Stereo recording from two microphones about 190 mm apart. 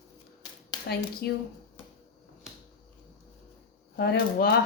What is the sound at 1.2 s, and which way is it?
Speech, 60° left (ahead or behind).